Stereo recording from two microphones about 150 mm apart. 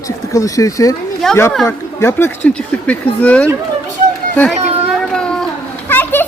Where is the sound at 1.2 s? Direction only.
Centre (ahead or behind).